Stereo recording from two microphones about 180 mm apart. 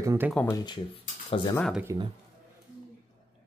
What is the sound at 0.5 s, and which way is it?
Speech, 25° left (ahead or behind).